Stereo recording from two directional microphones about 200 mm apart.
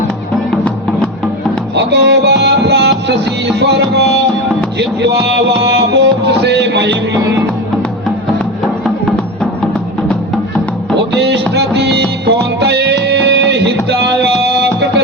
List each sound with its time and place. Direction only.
1.7 s music: 60° right (ahead or behind)
5.6 s music: 60° right (ahead or behind)
10.9 s music: 60° right (ahead or behind)